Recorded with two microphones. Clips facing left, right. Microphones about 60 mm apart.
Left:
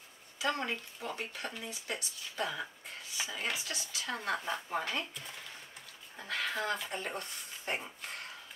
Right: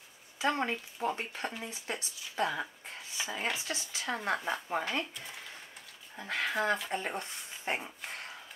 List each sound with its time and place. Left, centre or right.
0.4 s speech: right
4.5 s speech: centre
6.1 s speech: right